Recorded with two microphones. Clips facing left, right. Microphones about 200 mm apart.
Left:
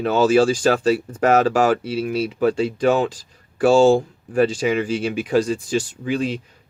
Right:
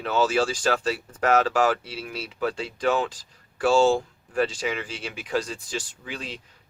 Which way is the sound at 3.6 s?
50° left (ahead or behind).